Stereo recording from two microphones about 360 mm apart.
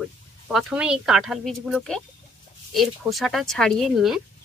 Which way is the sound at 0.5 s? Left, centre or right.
Centre.